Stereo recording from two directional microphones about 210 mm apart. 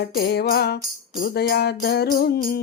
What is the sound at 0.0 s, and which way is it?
Music, 50° left (ahead or behind).